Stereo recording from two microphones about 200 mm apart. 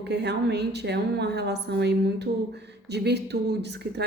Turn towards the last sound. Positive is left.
turn(degrees=-55)  # may be behind; listen again after turning